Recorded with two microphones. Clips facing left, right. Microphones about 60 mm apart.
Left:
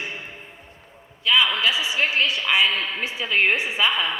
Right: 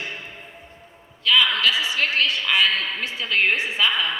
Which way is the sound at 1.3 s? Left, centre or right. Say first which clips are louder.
Right 1 dB; left.